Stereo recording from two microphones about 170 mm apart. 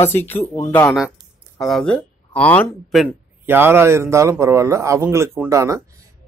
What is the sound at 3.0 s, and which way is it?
Speech, 10° right (ahead or behind).